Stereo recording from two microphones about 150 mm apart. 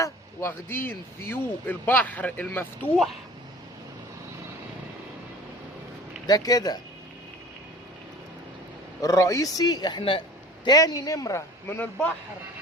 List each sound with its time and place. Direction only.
0.0 s speech: 15° left (ahead or behind)
6.2 s a man's voice: 25° left (ahead or behind)
9.0 s a man's voice: 25° left (ahead or behind)